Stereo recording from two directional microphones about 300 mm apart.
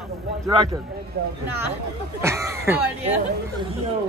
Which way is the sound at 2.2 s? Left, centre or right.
Centre.